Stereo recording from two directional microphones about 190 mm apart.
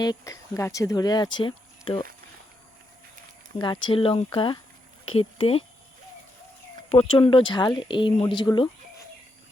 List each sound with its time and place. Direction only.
0.0 s speech: 20° left (ahead or behind)
3.6 s speech: 25° left (ahead or behind)
7.1 s speech: 25° left (ahead or behind)